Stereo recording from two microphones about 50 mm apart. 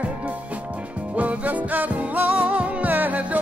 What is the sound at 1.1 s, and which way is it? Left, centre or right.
Music, right.